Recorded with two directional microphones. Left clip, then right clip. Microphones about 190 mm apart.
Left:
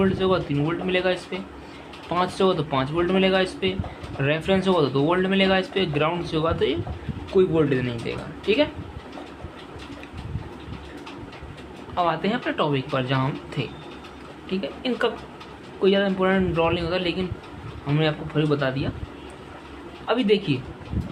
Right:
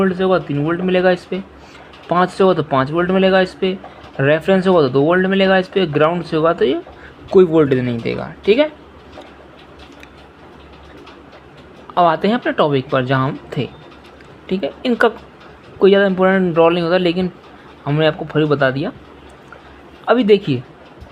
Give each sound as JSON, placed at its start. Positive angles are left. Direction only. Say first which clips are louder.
{"t": 0.0, "sound": "speech", "louder": "right 6 dB", "side_deg": -35}
{"t": 11.9, "sound": "speech", "louder": "right 9 dB", "side_deg": -45}
{"t": 20.1, "sound": "speech", "louder": "right 9 dB", "side_deg": -45}